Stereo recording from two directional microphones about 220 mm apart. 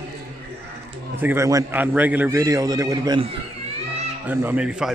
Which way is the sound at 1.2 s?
10° right (ahead or behind).